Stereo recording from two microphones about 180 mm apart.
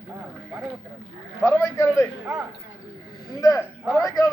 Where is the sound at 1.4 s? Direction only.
15° left (ahead or behind).